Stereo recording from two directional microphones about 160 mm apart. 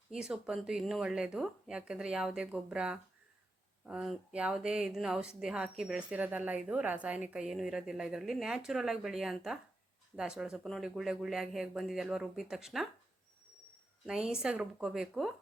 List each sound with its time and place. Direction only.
0.1 s a woman's voice: 5° right (ahead or behind)
14.1 s a woman's voice: 5° right (ahead or behind)